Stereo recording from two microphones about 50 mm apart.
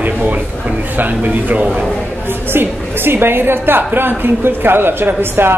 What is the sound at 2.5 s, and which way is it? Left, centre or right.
A woman's voice, right.